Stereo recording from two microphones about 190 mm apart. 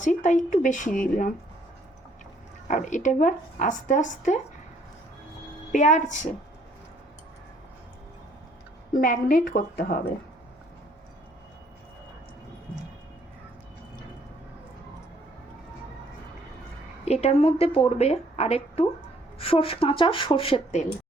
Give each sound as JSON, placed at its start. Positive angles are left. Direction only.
{"t": 0.0, "sound": "speech", "side_deg": 40}
{"t": 2.6, "sound": "speech", "side_deg": 40}
{"t": 5.7, "sound": "speech", "side_deg": 40}
{"t": 8.9, "sound": "speech", "side_deg": 45}
{"t": 17.1, "sound": "speech", "side_deg": 35}